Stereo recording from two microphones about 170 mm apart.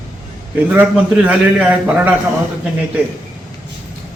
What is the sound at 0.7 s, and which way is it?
A man's voice, 10° right (ahead or behind).